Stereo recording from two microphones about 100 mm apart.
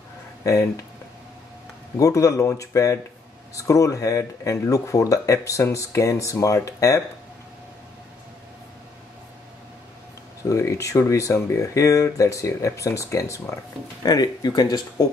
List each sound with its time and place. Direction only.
0.4 s speech: 35° left (ahead or behind)
2.0 s speech: 35° left (ahead or behind)
10.5 s speech: 30° left (ahead or behind)